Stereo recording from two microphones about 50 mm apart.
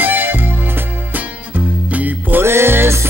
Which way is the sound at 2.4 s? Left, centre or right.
Right.